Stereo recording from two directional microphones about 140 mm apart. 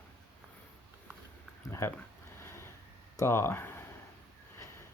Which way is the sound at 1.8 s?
20° left (ahead or behind).